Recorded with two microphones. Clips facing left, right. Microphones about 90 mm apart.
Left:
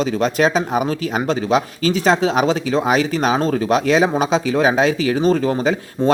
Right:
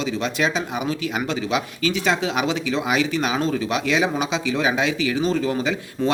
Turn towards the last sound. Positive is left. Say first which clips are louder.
# left 5 dB
turn(degrees=40)  # may be behind; listen again after turning